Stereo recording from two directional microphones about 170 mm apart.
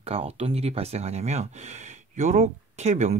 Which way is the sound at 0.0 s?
35° right (ahead or behind).